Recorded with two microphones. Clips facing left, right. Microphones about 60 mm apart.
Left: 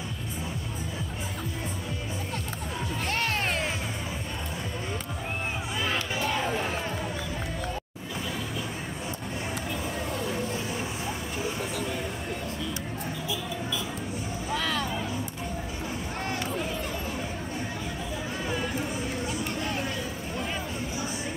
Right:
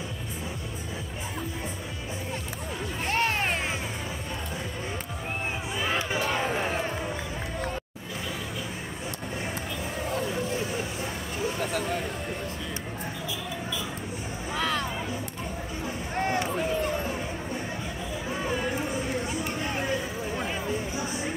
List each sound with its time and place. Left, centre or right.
3.1 s music: right
14.6 s music: centre